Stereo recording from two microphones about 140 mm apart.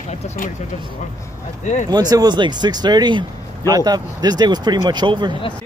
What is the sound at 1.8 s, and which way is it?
Speech, 30° right (ahead or behind).